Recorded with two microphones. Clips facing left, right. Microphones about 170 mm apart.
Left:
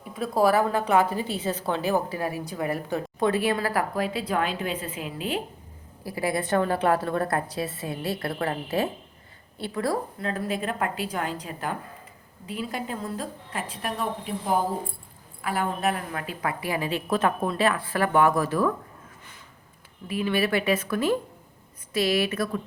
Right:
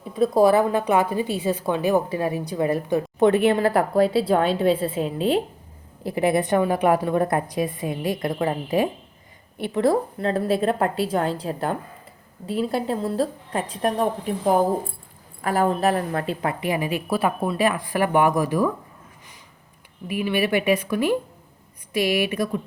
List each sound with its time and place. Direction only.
0.2 s a woman's voice: 20° right (ahead or behind)
20.1 s a woman's voice: 15° right (ahead or behind)